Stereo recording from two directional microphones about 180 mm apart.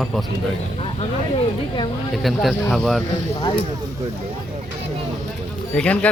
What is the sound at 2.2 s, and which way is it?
Speech, centre (ahead or behind).